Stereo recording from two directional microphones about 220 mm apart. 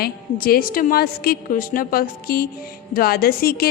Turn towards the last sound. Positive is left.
turn(degrees=45)  # may be behind; listen again after turning